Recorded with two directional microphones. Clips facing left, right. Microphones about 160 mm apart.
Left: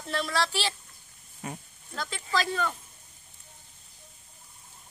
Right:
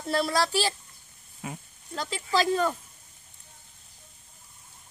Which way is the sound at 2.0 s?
35° right (ahead or behind).